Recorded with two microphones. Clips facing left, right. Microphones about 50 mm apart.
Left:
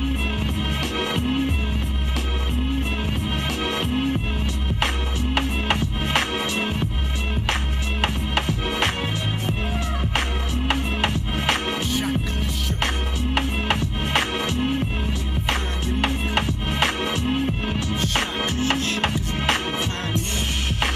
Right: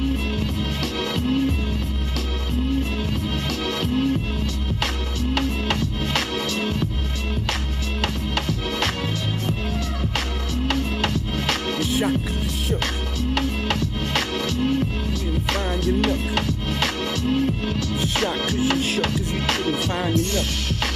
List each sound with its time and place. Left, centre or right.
0.9 s music: left
3.6 s music: left
8.0 s music: left
10.7 s music: left
12.8 s music: left
18.9 s music: left